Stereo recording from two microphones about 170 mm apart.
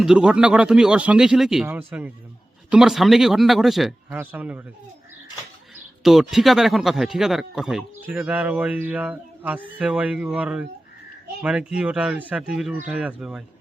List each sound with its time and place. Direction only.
0.0 s speech: 5° right (ahead or behind)
6.0 s speech: centre (ahead or behind)